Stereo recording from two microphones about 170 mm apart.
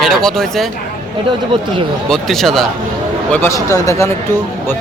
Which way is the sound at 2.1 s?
Centre (ahead or behind).